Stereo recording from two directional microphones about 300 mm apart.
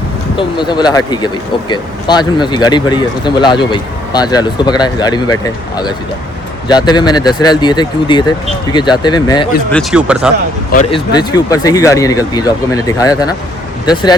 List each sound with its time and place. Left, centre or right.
0.3 s speech: centre
9.7 s speech: centre
10.7 s speech: left
11.1 s speech: centre